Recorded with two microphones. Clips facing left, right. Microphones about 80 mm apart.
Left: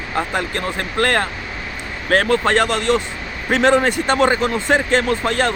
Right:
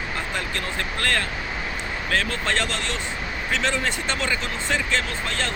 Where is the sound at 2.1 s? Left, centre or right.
Left.